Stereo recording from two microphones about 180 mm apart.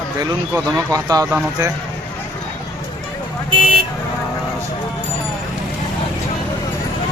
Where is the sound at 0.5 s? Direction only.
20° right (ahead or behind).